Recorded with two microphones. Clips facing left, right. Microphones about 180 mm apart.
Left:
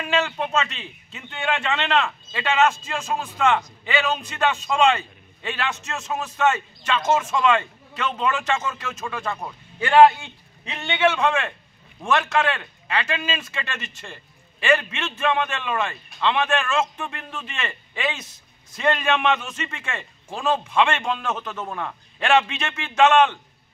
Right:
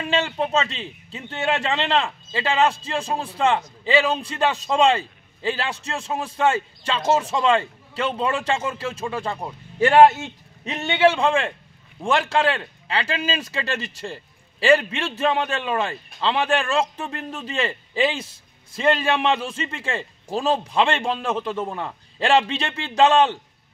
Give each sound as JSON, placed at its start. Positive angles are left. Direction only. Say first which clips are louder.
{"t": 0.0, "sound": "a man's voice", "louder": "right 1 dB", "side_deg": -30}